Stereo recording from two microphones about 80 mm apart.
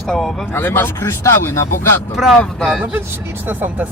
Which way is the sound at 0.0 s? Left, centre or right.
Centre.